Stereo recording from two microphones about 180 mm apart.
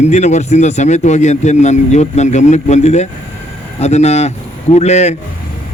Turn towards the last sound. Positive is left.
turn(degrees=40)  # may be behind; listen again after turning